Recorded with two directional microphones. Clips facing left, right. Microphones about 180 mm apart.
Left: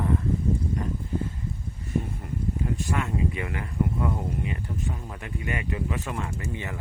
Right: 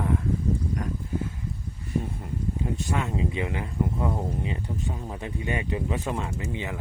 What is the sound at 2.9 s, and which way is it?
Speech, 20° right (ahead or behind).